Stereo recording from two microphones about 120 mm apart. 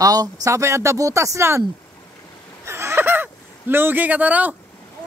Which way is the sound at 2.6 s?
20° right (ahead or behind).